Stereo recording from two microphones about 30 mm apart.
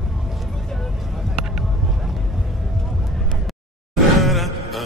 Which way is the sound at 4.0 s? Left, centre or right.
Centre.